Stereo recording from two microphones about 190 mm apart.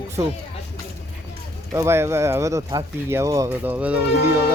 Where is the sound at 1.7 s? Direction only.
15° right (ahead or behind).